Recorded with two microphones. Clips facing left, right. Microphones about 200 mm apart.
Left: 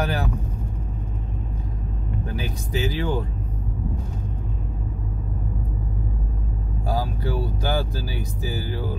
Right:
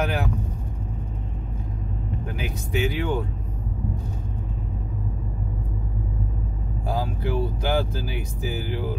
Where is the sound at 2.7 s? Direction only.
35° left (ahead or behind).